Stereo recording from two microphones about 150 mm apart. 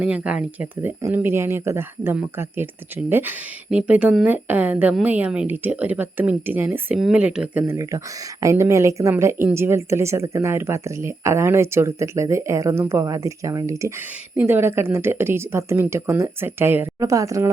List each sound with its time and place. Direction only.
0.0 s a woman's voice: 5° right (ahead or behind)
7.8 s a woman's voice: 20° right (ahead or behind)